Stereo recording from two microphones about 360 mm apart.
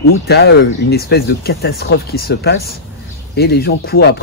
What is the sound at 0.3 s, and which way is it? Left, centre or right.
Speech, left.